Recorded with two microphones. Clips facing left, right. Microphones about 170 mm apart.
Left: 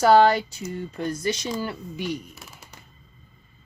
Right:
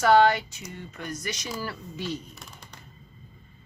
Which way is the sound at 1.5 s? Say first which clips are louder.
Left 4 dB; 20° left (ahead or behind).